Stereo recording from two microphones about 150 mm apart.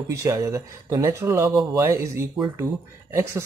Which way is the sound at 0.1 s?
25° right (ahead or behind).